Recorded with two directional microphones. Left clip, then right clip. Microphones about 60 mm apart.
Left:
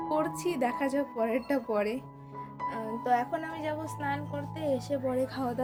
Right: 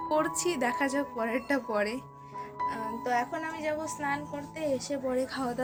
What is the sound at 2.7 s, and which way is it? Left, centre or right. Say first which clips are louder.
Speech: left 3 dB; left.